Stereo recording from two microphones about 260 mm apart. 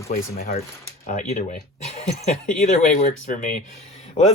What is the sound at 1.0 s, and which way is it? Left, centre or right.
Speech, left.